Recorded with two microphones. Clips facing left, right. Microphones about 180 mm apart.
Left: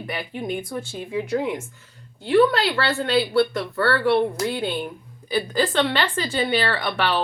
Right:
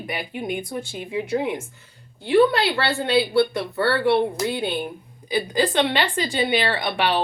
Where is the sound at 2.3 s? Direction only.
15° right (ahead or behind).